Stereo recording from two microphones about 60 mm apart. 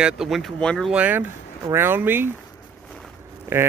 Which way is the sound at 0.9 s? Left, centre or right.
Right.